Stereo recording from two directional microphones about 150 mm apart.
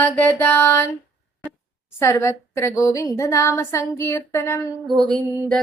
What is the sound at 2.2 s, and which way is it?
Speech, 20° left (ahead or behind).